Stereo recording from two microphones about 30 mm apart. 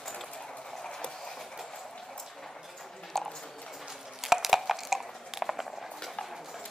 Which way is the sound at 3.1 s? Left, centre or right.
Centre.